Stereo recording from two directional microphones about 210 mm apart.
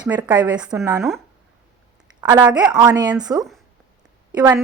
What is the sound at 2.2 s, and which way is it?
Speech, 20° right (ahead or behind).